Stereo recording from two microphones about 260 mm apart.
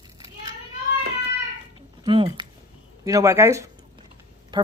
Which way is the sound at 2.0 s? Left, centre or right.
Centre.